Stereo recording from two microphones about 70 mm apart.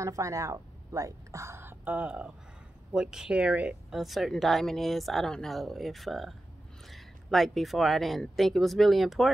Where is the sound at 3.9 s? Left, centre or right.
Centre.